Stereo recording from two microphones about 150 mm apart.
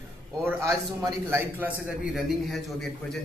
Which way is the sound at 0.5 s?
20° right (ahead or behind).